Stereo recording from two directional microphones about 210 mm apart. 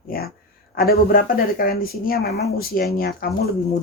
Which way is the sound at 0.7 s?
45° left (ahead or behind).